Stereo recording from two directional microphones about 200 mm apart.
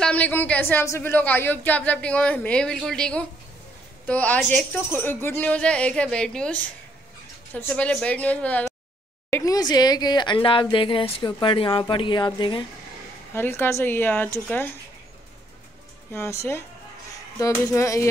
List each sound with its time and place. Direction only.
0.0 s speech: 5° left (ahead or behind); by 12.6 s 25° left (ahead or behind)
13.3 s speech: 10° left (ahead or behind)
16.1 s speech: 15° left (ahead or behind)
17.4 s speech: 15° left (ahead or behind)